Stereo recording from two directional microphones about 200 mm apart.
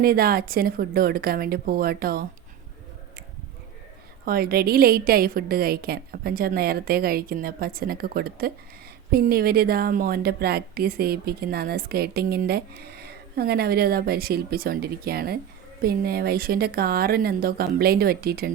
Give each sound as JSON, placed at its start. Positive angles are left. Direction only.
{"t": 0.0, "sound": "a woman's voice", "side_deg": -50}
{"t": 4.3, "sound": "a woman's voice", "side_deg": -50}